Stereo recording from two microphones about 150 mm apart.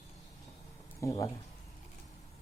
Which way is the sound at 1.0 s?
20° left (ahead or behind).